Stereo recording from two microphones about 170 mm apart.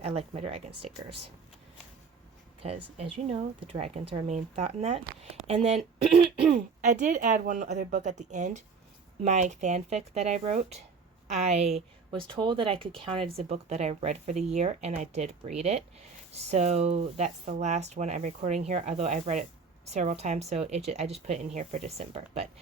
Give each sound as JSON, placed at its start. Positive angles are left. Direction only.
{"t": 0.0, "sound": "speech", "side_deg": -40}
{"t": 2.6, "sound": "speech", "side_deg": -35}
{"t": 6.5, "sound": "speech", "side_deg": -45}